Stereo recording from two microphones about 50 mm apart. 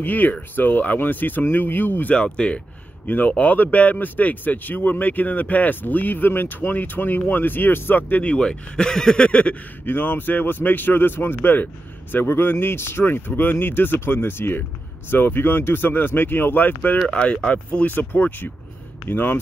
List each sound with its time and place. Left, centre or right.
0.0 s speech: left
2.1 s speech: left
9.8 s speech: left
17.1 s speech: left